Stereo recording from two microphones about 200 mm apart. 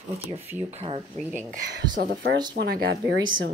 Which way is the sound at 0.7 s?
30° right (ahead or behind).